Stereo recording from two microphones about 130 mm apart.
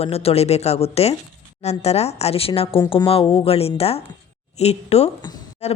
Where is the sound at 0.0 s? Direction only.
50° left (ahead or behind).